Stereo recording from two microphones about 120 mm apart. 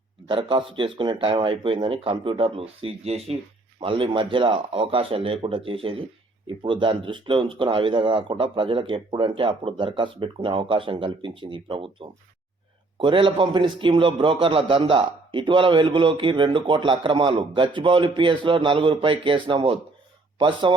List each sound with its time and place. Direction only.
0.3 s speech: 45° right (ahead or behind)
3.8 s speech: 45° right (ahead or behind)